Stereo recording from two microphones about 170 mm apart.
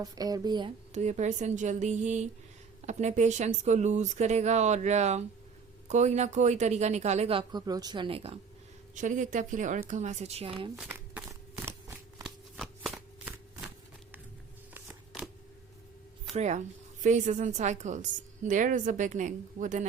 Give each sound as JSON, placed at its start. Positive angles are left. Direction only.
{"t": 0.0, "sound": "speech", "side_deg": -20}
{"t": 0.9, "sound": "a woman's voice", "side_deg": -45}
{"t": 7.6, "sound": "speech", "side_deg": -20}
{"t": 9.0, "sound": "a woman's voice", "side_deg": -45}
{"t": 10.8, "sound": "a sound", "side_deg": -10}
{"t": 12.2, "sound": "shuffling cards", "side_deg": 0}
{"t": 14.7, "sound": "shuffling cards", "side_deg": -5}
{"t": 16.3, "sound": "a woman's voice", "side_deg": -40}